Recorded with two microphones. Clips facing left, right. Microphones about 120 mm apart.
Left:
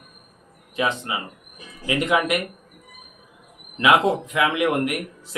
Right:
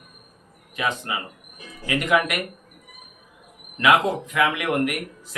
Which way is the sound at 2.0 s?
20° left (ahead or behind).